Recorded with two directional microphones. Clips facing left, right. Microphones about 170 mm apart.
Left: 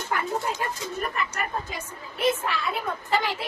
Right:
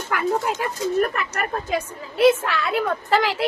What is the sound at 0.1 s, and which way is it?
Speech, 75° right (ahead or behind).